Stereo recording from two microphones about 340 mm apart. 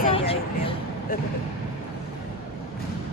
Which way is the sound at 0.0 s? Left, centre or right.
Centre.